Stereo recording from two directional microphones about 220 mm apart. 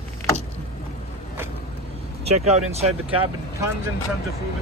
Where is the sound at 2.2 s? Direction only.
30° right (ahead or behind).